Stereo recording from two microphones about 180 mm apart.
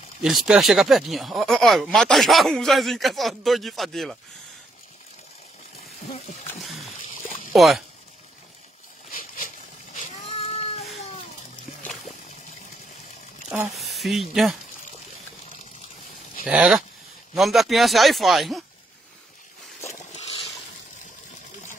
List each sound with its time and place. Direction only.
0.2 s speech: centre (ahead or behind)
7.5 s speech: centre (ahead or behind)
9.9 s a sound: 35° left (ahead or behind)
13.7 s speech: centre (ahead or behind)
16.4 s speech: 5° right (ahead or behind)
19.9 s vehicle: 40° left (ahead or behind)